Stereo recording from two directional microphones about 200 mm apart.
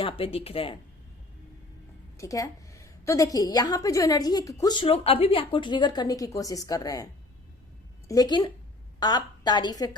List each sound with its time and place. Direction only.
0.0 s a woman's voice: 25° left (ahead or behind)
2.1 s a woman's voice: 15° left (ahead or behind)